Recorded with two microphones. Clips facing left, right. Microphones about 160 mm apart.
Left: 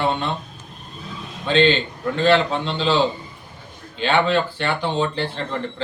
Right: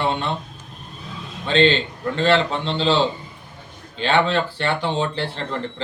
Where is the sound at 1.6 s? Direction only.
Centre (ahead or behind).